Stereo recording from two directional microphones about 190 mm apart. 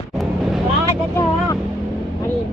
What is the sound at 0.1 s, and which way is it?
Vehicle, centre (ahead or behind).